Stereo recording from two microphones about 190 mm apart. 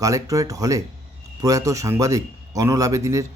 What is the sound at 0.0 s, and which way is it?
A man's voice, 15° right (ahead or behind).